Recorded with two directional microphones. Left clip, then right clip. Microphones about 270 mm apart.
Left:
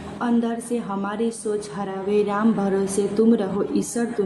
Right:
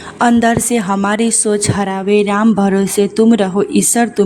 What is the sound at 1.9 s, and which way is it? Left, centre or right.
Music, right.